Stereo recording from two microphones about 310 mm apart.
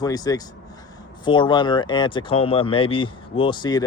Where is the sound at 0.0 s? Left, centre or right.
Centre.